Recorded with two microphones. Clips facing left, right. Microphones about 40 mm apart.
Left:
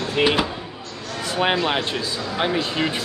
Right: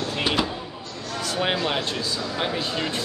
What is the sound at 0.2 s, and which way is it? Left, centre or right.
Speech, centre.